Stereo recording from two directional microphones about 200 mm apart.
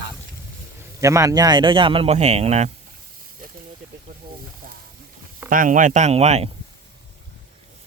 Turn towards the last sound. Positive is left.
turn(degrees=-30)  # may be behind; listen again after turning